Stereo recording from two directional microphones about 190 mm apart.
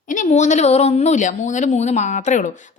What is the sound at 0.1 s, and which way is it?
Speech, 40° left (ahead or behind).